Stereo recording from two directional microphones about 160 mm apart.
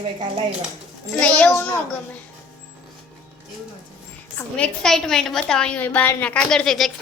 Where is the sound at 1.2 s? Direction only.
10° left (ahead or behind).